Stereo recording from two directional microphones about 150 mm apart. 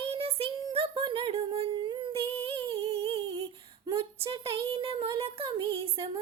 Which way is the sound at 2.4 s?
40° right (ahead or behind).